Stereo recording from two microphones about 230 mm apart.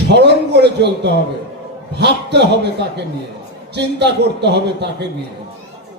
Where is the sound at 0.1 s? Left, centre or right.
Right.